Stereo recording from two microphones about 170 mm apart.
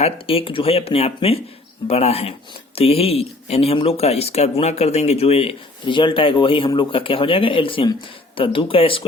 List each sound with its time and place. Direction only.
0.0 s a man's voice: 35° left (ahead or behind)